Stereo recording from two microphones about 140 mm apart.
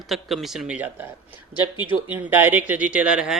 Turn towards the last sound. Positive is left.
turn(degrees=-5)  # may be behind; listen again after turning